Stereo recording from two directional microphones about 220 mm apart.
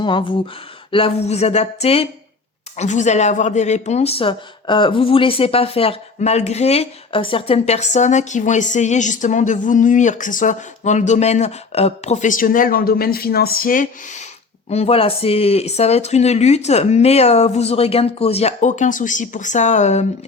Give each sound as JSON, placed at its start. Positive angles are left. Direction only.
{"t": 0.0, "sound": "speech", "side_deg": 20}